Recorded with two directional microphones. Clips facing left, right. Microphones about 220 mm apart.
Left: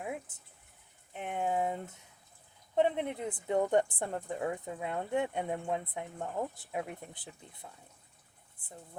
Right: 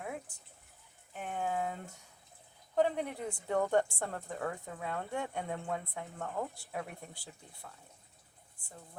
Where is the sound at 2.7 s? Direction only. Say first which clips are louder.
Left 2 dB; 20° left (ahead or behind).